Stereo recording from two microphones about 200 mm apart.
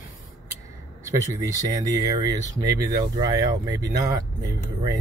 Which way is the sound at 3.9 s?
55° right (ahead or behind).